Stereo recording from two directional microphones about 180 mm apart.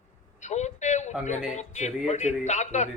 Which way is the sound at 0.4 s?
40° left (ahead or behind).